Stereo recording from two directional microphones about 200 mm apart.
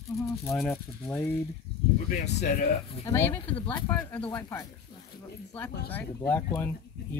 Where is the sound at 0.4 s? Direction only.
10° left (ahead or behind).